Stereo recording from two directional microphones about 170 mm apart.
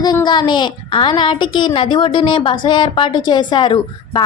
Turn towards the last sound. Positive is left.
turn(degrees=25)  # may be behind; listen again after turning